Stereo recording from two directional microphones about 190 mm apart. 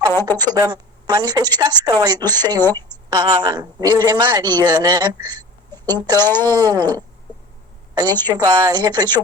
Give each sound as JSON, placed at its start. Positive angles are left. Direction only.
{"t": 0.3, "sound": "a woman's voice", "side_deg": -20}
{"t": 7.9, "sound": "a woman's voice", "side_deg": -20}